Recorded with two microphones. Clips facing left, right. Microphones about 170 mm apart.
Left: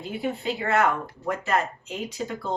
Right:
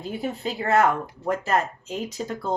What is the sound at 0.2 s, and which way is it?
Speech, 40° right (ahead or behind).